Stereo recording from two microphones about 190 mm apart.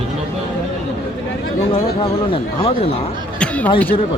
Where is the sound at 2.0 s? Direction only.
30° left (ahead or behind).